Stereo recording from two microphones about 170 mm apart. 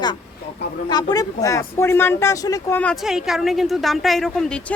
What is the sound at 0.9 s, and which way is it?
Speech, 25° left (ahead or behind).